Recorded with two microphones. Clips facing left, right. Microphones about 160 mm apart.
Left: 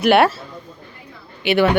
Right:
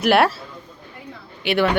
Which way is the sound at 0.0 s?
Centre (ahead or behind).